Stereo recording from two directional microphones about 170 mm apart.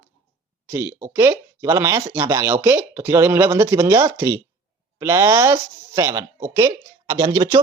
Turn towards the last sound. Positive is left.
turn(degrees=-25)  # may be behind; listen again after turning